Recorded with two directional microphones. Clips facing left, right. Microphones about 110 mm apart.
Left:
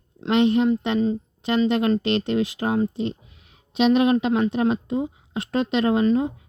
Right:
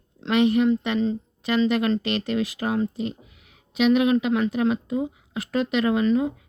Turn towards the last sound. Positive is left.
turn(degrees=25)  # may be behind; listen again after turning